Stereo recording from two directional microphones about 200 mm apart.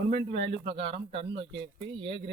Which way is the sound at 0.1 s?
30° right (ahead or behind).